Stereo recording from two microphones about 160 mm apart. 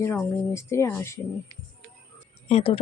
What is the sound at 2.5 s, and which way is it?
Speech, 35° left (ahead or behind).